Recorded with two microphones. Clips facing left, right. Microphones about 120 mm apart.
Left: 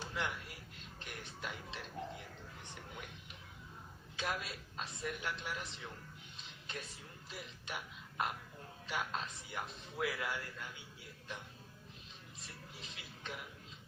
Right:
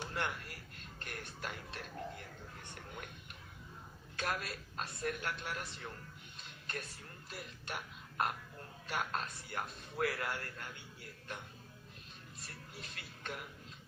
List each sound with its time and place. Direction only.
0.0 s a sound: 55° right (ahead or behind)
0.5 s music: 55° right (ahead or behind)
4.2 s a woman's voice: 55° right (ahead or behind)
6.3 s a sound: 55° right (ahead or behind)
7.3 s a woman's voice: 55° right (ahead or behind)
8.9 s a woman's voice: 55° right (ahead or behind)
12.7 s a woman's voice: 55° right (ahead or behind)